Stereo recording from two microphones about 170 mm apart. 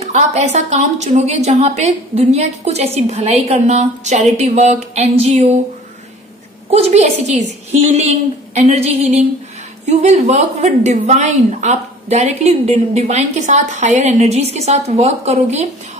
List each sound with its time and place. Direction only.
0.0 s a woman's voice: 40° right (ahead or behind)
6.7 s a woman's voice: 40° right (ahead or behind)